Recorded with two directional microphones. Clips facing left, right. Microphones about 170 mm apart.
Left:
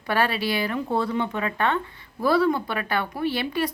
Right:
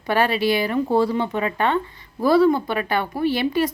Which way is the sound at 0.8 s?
30° right (ahead or behind).